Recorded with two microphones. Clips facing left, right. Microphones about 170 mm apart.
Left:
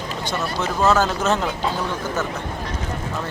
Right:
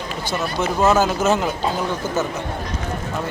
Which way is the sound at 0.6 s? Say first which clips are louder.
Right 2 dB; 15° right (ahead or behind).